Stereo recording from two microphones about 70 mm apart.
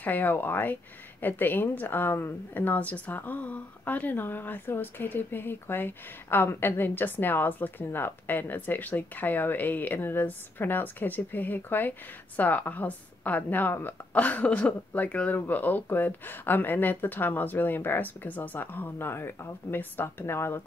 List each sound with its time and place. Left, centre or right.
0.0 s a woman's voice: left